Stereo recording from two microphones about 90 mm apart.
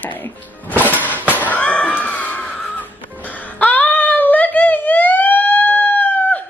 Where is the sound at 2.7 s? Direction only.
20° left (ahead or behind).